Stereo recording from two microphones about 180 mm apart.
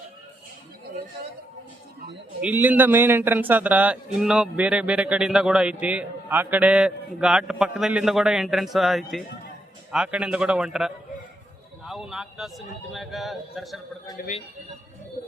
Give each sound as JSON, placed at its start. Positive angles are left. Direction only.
{"t": 2.4, "sound": "a man's voice", "side_deg": -10}
{"t": 14.2, "sound": "speech", "side_deg": 60}